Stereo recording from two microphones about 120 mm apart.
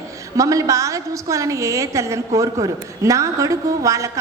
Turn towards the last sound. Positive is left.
turn(degrees=-25)  # may be behind; listen again after turning